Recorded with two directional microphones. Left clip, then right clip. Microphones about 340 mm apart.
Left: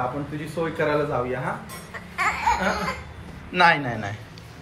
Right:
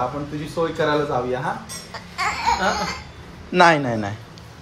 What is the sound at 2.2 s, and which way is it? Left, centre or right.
Speech, centre.